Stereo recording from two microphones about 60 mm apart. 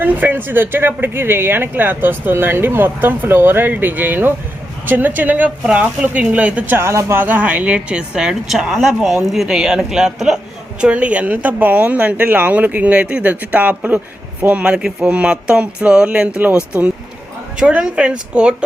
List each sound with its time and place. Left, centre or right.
0.0 s a woman's voice: right
6.8 s speech: right
7.3 s a woman's voice: right; by 10.4 s centre
10.8 s a woman's voice: right
14.6 s a woman's voice: centre
17.6 s a woman's voice: centre